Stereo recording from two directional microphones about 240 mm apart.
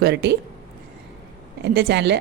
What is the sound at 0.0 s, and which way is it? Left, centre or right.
Speech, right.